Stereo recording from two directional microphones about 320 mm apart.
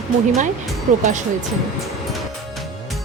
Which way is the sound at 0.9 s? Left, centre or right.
Right.